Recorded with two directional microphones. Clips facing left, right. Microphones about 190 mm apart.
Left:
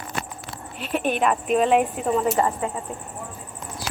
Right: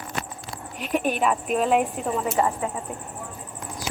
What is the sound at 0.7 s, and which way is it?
Speech, 10° right (ahead or behind).